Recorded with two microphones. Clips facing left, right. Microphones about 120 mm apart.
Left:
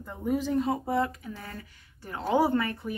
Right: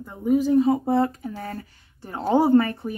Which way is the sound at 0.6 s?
20° right (ahead or behind).